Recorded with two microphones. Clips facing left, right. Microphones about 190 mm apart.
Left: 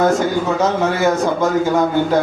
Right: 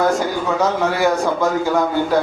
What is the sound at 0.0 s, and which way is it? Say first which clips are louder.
A man's voice: left 3 dB; 20° left (ahead or behind).